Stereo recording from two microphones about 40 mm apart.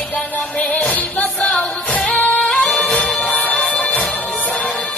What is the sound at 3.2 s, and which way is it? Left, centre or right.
Music, left.